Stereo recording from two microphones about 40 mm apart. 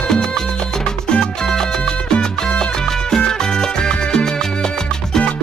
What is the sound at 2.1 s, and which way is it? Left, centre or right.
Salsa music, left.